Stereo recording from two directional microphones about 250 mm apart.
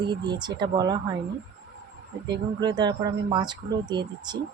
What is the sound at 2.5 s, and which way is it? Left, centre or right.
Speech, centre.